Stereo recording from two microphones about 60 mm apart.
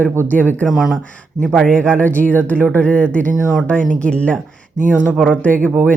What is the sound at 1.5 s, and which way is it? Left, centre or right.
Speech, centre.